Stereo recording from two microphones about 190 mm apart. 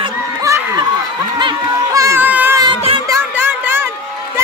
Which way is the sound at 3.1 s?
10° right (ahead or behind).